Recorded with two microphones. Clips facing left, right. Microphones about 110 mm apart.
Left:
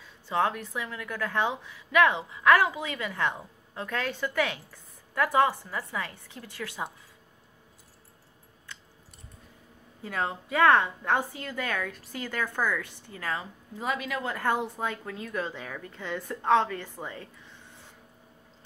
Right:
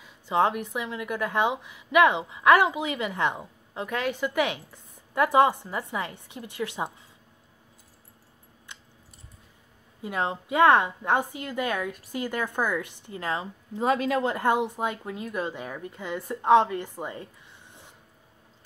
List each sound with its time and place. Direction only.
0.0 s speech: 15° right (ahead or behind)
10.0 s a woman's voice: 20° right (ahead or behind)
13.8 s a woman's voice: 35° right (ahead or behind); by 17.3 s 20° right (ahead or behind)